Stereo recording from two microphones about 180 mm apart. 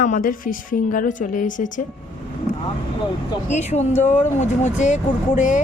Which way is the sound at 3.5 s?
40° left (ahead or behind).